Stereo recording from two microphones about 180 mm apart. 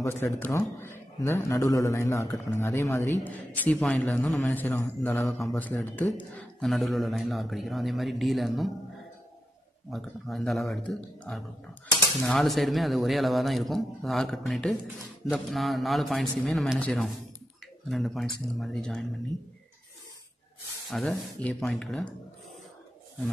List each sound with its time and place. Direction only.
0.0 s a man's voice: 10° left (ahead or behind)
9.8 s speech: centre (ahead or behind)
21.1 s speech: 5° left (ahead or behind)